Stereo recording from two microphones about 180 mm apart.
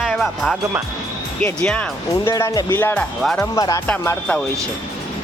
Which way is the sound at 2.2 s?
15° left (ahead or behind).